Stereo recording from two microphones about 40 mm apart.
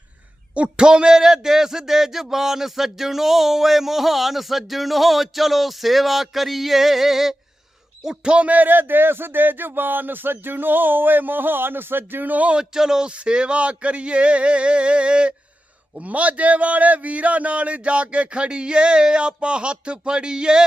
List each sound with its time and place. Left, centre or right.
0.5 s a man's voice: right; by 7.3 s centre
8.0 s speech: centre
8.4 s speech: right
12.3 s speech: right
12.5 s speech: centre
13.1 s a man's voice: right
16.0 s a man's voice: right; by 20.7 s centre